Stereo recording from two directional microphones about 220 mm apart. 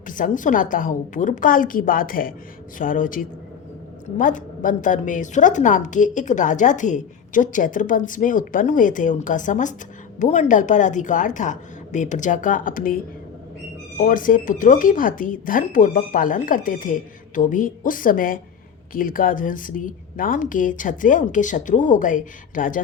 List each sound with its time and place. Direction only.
0.1 s a woman's voice: 35° left (ahead or behind)
14.0 s a woman's voice: 40° left (ahead or behind)